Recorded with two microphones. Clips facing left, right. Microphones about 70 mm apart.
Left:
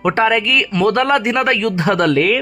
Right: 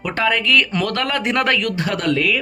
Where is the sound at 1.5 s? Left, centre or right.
Left.